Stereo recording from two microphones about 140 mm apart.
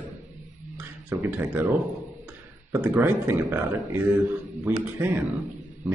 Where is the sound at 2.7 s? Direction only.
15° right (ahead or behind).